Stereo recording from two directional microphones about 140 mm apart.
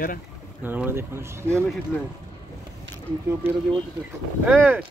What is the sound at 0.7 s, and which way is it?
Speech, 15° right (ahead or behind).